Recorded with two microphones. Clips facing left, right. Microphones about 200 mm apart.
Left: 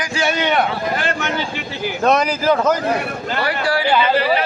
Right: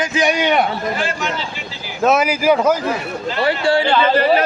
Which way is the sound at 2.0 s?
5° right (ahead or behind).